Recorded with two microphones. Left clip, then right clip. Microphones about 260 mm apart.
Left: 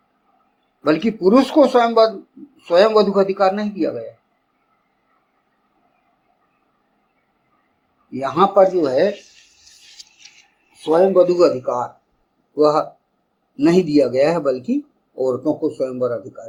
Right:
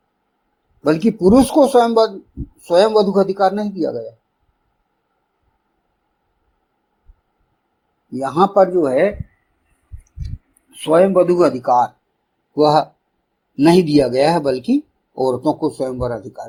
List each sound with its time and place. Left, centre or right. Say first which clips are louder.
0.9 s speech: right 2 dB; right
8.2 s speech: even; right
10.9 s speech: right 1 dB; right